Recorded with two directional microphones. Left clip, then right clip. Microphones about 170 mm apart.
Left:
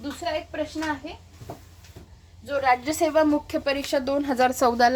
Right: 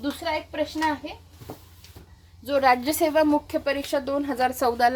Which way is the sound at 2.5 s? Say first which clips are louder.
Right 2 dB; 50° right (ahead or behind).